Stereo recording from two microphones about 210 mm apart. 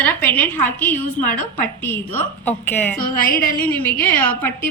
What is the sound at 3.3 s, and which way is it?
Speech, 45° left (ahead or behind).